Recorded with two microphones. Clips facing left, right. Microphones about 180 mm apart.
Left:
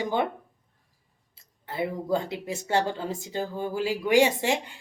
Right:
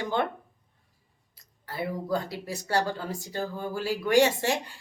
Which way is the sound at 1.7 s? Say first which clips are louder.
Left 3 dB; 20° left (ahead or behind).